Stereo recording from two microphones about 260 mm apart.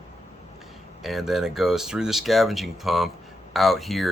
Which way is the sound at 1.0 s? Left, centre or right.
Centre.